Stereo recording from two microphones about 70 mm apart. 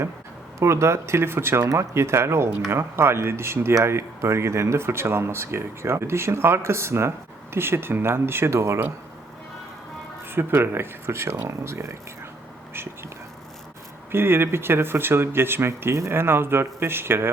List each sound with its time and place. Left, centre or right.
0.6 s speech: right
10.2 s speech: right
14.1 s speech: right